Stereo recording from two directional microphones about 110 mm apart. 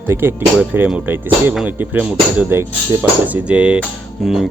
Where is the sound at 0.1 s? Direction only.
20° right (ahead or behind).